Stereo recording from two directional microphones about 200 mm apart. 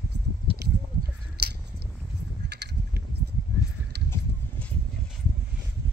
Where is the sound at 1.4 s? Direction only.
55° right (ahead or behind).